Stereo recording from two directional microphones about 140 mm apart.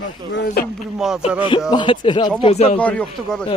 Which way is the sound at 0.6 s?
90° left.